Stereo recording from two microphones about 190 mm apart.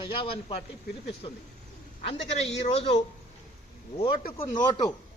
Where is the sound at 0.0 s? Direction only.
25° left (ahead or behind).